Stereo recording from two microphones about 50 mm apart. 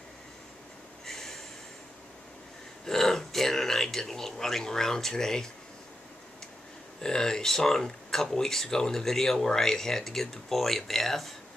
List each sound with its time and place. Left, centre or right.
1.0 s snort: centre
2.8 s speech: centre
7.0 s speech: centre